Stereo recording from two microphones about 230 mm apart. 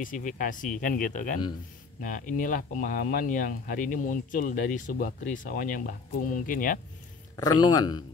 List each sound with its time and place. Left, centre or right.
0.0 s speech: left
7.3 s speech: centre